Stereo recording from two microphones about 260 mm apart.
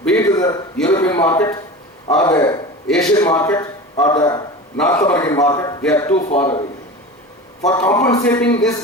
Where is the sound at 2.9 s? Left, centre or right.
Centre.